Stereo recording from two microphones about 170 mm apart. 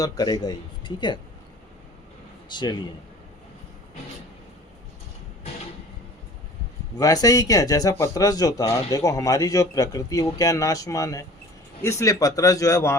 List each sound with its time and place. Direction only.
0.0 s a man's voice: 25° left (ahead or behind)
2.5 s a man's voice: 25° left (ahead or behind)
6.9 s a man's voice: 20° left (ahead or behind)